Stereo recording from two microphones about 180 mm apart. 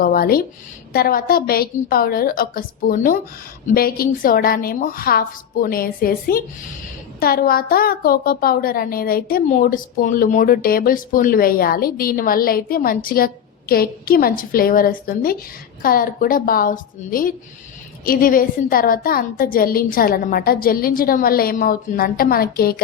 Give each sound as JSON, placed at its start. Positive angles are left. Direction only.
{"t": 0.0, "sound": "a woman's voice", "side_deg": 55}